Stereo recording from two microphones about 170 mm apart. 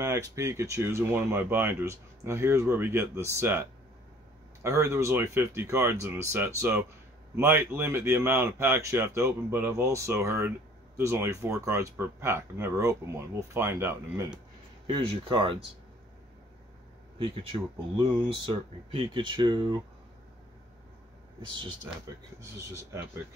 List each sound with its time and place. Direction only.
0.0 s speech: 15° right (ahead or behind)
4.6 s speech: 15° right (ahead or behind)
14.9 s speech: 25° right (ahead or behind)
17.2 s speech: 30° right (ahead or behind)